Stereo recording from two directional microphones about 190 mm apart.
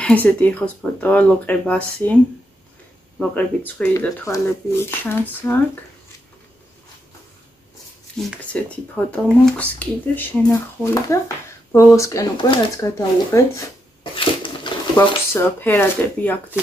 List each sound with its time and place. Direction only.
0.0 s speech: 10° left (ahead or behind)
3.2 s speech: 5° left (ahead or behind)
8.2 s speech: 5° left (ahead or behind)
14.1 s a sound: 25° left (ahead or behind)
15.0 s speech: 10° left (ahead or behind)